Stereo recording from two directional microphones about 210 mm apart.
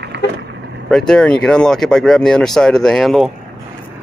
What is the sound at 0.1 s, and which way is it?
Vehicle, 55° right (ahead or behind).